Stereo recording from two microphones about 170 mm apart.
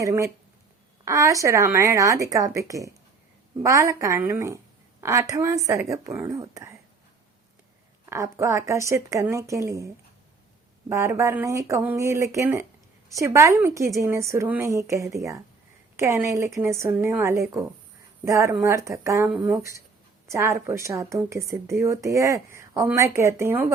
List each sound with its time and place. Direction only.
0.0 s a woman's voice: 20° right (ahead or behind)
8.0 s a woman's voice: 20° right (ahead or behind)